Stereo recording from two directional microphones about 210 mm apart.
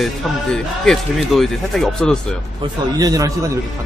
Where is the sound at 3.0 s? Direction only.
20° right (ahead or behind).